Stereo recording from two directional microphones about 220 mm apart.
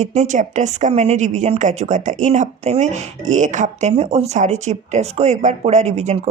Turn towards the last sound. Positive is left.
turn(degrees=-30)  # may be behind; listen again after turning